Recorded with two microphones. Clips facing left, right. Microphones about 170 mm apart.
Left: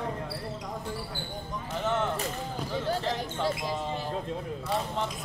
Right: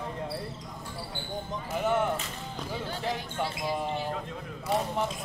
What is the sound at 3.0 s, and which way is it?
Speech, 10° right (ahead or behind).